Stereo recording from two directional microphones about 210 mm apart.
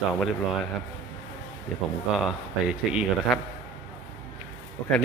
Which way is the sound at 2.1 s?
5° right (ahead or behind).